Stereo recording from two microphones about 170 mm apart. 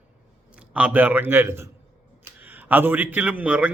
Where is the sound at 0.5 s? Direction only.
5° right (ahead or behind).